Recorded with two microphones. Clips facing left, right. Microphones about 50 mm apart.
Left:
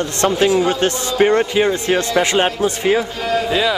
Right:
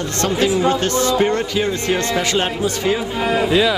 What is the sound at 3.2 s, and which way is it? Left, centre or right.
Speech, centre.